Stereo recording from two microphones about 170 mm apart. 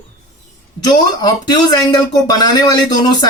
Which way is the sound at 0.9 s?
25° left (ahead or behind).